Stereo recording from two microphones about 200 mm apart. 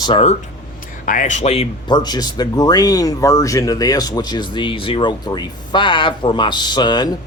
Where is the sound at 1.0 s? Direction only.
40° left (ahead or behind).